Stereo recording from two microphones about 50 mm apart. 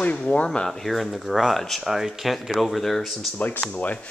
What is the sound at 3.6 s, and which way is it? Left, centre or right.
Speech, left.